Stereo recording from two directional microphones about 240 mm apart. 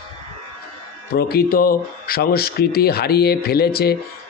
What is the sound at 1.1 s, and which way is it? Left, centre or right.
Speech, left.